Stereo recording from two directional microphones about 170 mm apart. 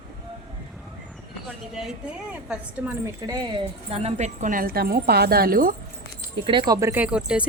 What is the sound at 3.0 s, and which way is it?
Speech, 25° right (ahead or behind).